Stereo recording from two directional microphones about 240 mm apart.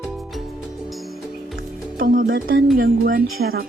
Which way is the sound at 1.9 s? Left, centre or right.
Right.